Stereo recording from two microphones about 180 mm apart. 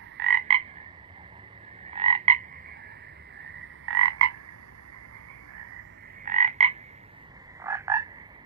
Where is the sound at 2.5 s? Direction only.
55° right (ahead or behind).